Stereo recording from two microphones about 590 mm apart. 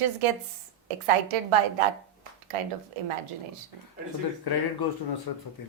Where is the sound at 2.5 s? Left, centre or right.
Right.